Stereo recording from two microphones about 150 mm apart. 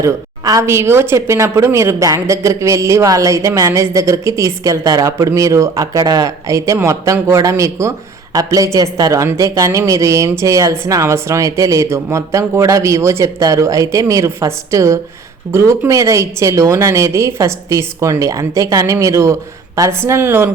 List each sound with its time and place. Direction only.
0.0 s speech: 20° right (ahead or behind)